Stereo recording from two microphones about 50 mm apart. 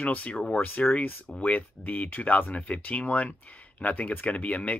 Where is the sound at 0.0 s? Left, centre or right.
Left.